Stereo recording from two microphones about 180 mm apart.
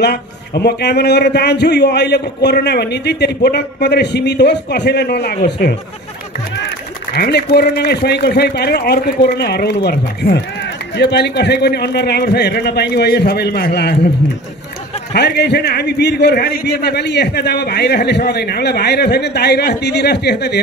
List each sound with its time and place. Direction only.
0.0 s a man's voice: 65° left (ahead or behind)
7.2 s a man's voice: 65° left (ahead or behind)
15.1 s a man's voice: 70° left (ahead or behind)